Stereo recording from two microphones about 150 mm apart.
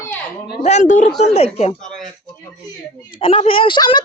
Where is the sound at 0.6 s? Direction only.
50° left (ahead or behind).